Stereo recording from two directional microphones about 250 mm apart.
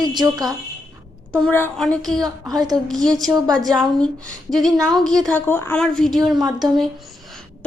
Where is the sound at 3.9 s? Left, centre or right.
Centre.